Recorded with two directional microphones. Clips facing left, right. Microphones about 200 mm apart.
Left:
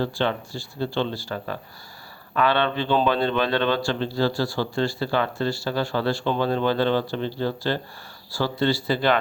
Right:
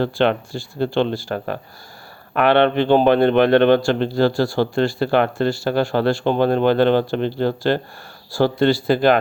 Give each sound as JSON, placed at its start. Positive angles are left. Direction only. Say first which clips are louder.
{"t": 0.0, "sound": "speech", "louder": "right 6 dB", "side_deg": -60}